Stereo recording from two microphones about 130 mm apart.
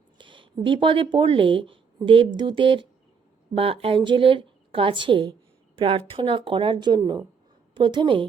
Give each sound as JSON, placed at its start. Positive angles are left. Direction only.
{"t": 0.2, "sound": "a woman's voice", "side_deg": -40}